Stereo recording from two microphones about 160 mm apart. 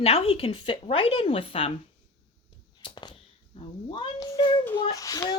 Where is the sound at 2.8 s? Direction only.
30° left (ahead or behind).